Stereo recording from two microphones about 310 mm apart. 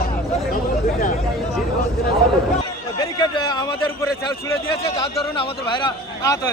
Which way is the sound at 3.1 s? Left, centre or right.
Centre.